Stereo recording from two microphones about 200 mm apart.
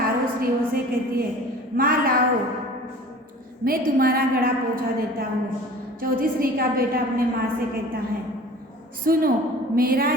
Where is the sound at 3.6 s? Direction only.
45° right (ahead or behind).